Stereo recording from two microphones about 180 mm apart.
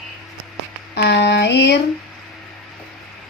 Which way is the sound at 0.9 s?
70° left (ahead or behind).